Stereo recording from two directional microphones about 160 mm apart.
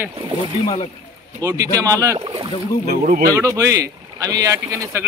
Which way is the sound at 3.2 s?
20° right (ahead or behind).